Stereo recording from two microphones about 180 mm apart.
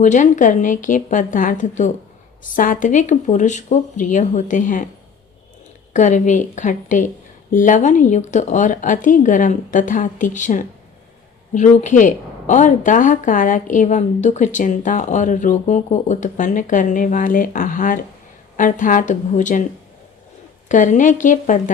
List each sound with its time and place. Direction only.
0.0 s a woman's voice: 45° left (ahead or behind)
5.9 s a woman's voice: 45° left (ahead or behind)
20.7 s a woman's voice: 45° left (ahead or behind)